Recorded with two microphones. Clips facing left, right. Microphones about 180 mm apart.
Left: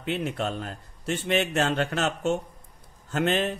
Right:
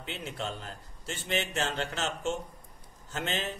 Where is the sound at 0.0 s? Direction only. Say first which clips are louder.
Left 9 dB; 60° left (ahead or behind).